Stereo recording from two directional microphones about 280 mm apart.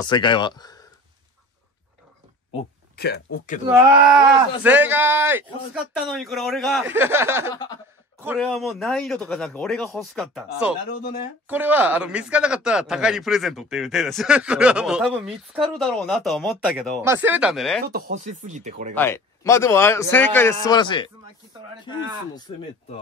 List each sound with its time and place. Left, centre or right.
0.0 s a man's voice: centre
3.0 s speech: left
4.6 s a man's voice: centre
7.5 s a man's voice: centre
8.2 s speech: centre
17.8 s speech: right
18.9 s a man's voice: centre